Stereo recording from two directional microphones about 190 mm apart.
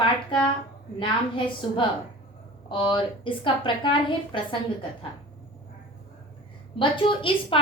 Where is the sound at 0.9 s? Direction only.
25° left (ahead or behind).